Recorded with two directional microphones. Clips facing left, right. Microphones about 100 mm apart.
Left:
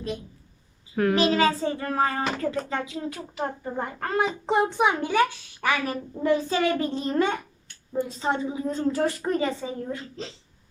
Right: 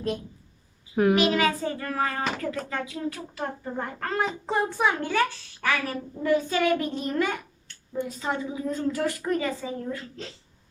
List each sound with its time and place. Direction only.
1.1 s a woman's voice: 30° left (ahead or behind); by 5.8 s 15° left (ahead or behind)
6.2 s a woman's voice: 30° left (ahead or behind)